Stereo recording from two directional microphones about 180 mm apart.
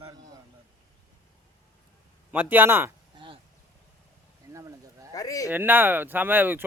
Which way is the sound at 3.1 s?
30° right (ahead or behind).